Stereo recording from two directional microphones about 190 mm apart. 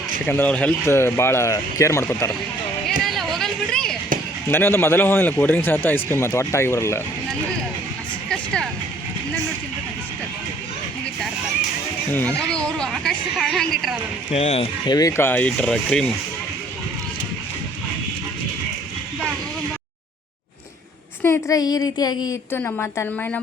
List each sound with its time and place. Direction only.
0.3 s a man's voice: 10° left (ahead or behind)
3.0 s a sound: centre (ahead or behind)
4.4 s a man's voice: 10° left (ahead or behind)
8.3 s music: centre (ahead or behind)
12.4 s a woman's voice: 5° left (ahead or behind)
14.3 s speech: 35° left (ahead or behind)
14.8 s a man's voice: 20° left (ahead or behind); by 16.1 s 5° left (ahead or behind)
21.2 s a man's voice: 15° left (ahead or behind)